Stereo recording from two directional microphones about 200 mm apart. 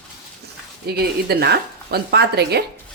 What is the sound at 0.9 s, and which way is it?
Speech, 50° right (ahead or behind).